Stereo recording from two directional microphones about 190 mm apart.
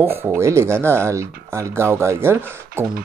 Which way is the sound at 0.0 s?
10° right (ahead or behind).